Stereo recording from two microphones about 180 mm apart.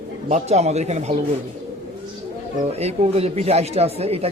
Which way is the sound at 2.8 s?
35° right (ahead or behind).